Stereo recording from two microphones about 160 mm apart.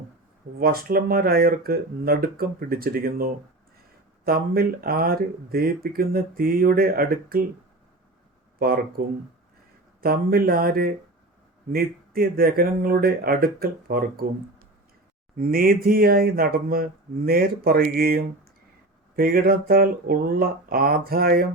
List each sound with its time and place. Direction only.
0.6 s speech: 70° right (ahead or behind)
8.5 s speech: 65° right (ahead or behind)
10.0 s speech: 70° right (ahead or behind)
15.4 s speech: 65° right (ahead or behind)